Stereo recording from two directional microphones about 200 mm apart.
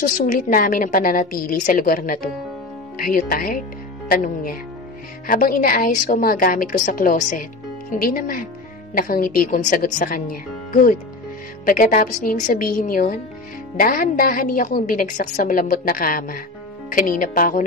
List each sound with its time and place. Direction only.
0.3 s a woman's voice: 45° left (ahead or behind)